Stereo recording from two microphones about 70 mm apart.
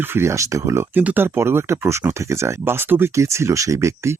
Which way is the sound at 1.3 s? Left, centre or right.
Right.